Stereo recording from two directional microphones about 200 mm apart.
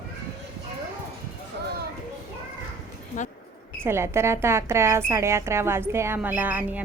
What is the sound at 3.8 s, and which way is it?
Speech, 15° right (ahead or behind).